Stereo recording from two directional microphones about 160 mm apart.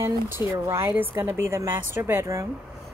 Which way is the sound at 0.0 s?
15° right (ahead or behind).